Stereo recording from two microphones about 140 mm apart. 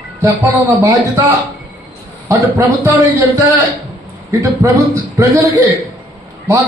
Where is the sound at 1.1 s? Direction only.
25° right (ahead or behind).